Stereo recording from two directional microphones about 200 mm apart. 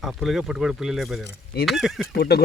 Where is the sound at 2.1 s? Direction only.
55° left (ahead or behind).